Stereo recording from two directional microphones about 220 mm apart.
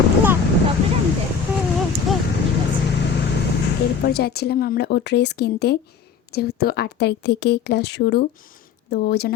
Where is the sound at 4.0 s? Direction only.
45° left (ahead or behind).